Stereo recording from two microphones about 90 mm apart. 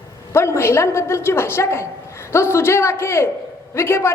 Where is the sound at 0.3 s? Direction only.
30° left (ahead or behind).